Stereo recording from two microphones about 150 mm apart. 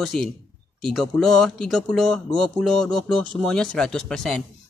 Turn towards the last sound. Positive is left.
turn(degrees=5)  # may be behind; listen again after turning